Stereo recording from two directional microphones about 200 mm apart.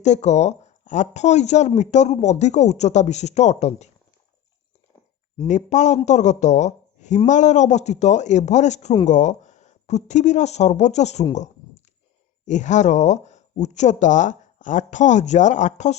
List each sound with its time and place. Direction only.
0.0 s speech: 35° left (ahead or behind)
5.4 s a man's voice: 35° left (ahead or behind)
12.5 s speech: 35° left (ahead or behind)